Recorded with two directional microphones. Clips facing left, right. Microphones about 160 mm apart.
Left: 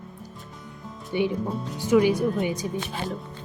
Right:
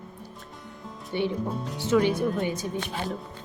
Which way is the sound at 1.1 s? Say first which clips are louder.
Left 2 dB; 15° left (ahead or behind).